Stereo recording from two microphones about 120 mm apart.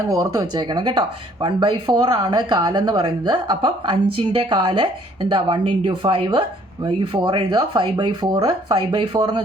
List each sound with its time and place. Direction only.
0.1 s speech: 30° right (ahead or behind)